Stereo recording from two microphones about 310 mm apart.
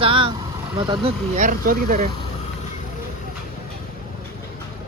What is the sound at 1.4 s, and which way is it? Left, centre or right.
Speech, right.